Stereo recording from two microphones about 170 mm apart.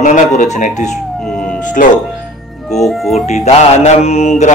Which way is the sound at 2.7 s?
Centre (ahead or behind).